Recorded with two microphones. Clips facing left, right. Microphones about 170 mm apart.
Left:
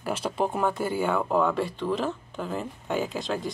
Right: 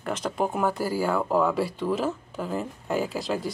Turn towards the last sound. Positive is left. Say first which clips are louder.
# right 1 dB
turn(degrees=-5)  # may be behind; listen again after turning